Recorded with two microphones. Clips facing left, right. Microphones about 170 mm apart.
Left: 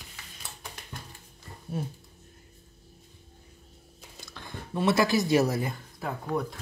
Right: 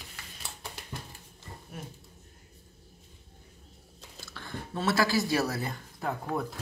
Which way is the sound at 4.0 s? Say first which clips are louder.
Even; 15° left (ahead or behind).